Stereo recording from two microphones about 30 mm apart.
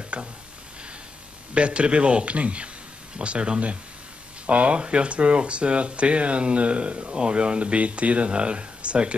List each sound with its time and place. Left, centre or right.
0.1 s speech: right
1.5 s speech: right
4.5 s speech: right
4.7 s speech: right